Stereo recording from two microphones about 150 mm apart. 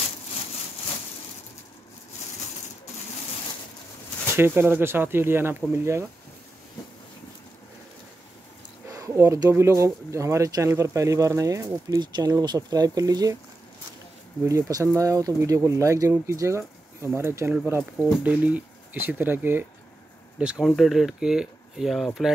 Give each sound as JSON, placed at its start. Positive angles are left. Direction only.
{"t": 4.4, "sound": "speech", "side_deg": -15}
{"t": 8.9, "sound": "speech", "side_deg": -20}
{"t": 14.4, "sound": "speech", "side_deg": -20}